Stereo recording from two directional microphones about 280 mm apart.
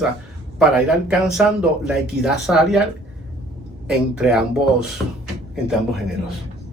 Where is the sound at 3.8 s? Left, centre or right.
Centre.